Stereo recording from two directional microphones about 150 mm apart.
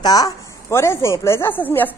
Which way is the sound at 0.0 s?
25° left (ahead or behind).